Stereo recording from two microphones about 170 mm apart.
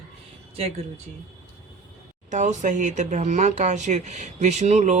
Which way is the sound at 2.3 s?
45° right (ahead or behind).